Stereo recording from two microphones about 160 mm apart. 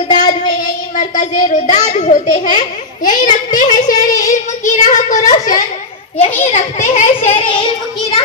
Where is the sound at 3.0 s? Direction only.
55° left (ahead or behind).